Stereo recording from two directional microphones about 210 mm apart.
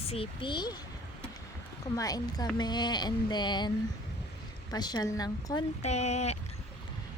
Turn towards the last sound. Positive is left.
turn(degrees=30)  # may be behind; listen again after turning